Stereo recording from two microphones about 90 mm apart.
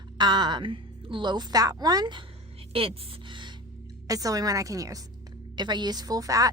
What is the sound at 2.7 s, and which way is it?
Speech, 90° right.